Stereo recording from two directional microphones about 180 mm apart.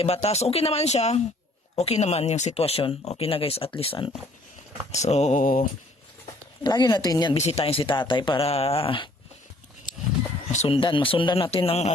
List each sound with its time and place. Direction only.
0.0 s speech: 35° left (ahead or behind)
6.6 s speech: 25° left (ahead or behind)
7.3 s speech: 35° left (ahead or behind)
9.9 s wild animals: 45° left (ahead or behind)
10.5 s speech: 35° left (ahead or behind)